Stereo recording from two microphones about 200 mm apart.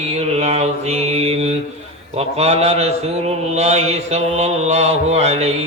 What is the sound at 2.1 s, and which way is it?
A man's voice, 30° right (ahead or behind).